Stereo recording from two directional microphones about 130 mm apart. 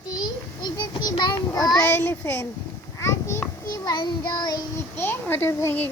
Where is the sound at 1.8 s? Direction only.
15° left (ahead or behind).